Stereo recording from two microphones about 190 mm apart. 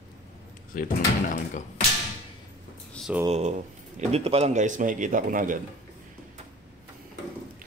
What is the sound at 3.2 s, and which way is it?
Speech, 35° right (ahead or behind).